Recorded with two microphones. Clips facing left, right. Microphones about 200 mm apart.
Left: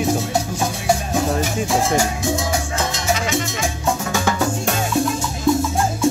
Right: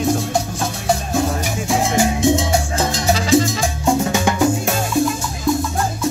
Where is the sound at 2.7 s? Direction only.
35° right (ahead or behind).